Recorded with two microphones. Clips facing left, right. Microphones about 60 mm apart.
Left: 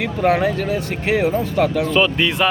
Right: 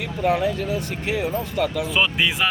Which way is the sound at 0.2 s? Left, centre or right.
Left.